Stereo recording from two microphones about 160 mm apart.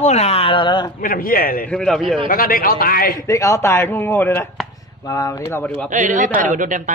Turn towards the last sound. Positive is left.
turn(degrees=-55)  # may be behind; listen again after turning